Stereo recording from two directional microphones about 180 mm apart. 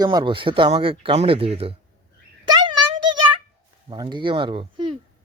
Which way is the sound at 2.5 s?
25° right (ahead or behind).